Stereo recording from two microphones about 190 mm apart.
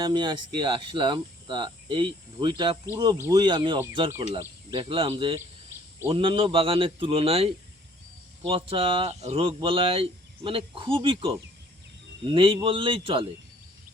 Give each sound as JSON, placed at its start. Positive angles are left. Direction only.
{"t": 0.0, "sound": "speech", "side_deg": -20}
{"t": 4.7, "sound": "speech", "side_deg": -30}